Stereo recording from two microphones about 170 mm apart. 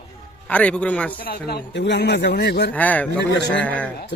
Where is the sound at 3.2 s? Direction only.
90° left.